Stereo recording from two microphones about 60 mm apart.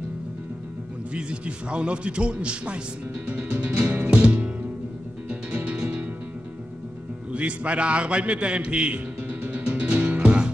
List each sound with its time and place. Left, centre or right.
1.1 s a man's voice: centre
3.5 s music: right
7.3 s a sound: right